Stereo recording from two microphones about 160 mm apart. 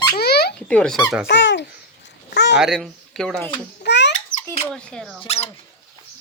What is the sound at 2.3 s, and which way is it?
Speech, 90° left.